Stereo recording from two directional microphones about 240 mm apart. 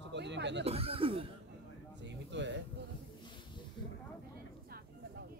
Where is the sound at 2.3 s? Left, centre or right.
Right.